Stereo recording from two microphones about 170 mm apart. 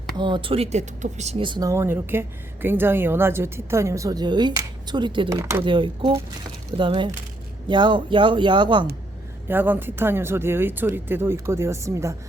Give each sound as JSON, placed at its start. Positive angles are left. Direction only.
{"t": 0.2, "sound": "speech", "side_deg": -30}
{"t": 5.4, "sound": "speech", "side_deg": -15}
{"t": 5.6, "sound": "speech", "side_deg": -30}
{"t": 9.5, "sound": "speech", "side_deg": -10}